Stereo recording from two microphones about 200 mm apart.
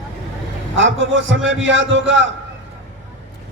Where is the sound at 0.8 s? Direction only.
70° right (ahead or behind).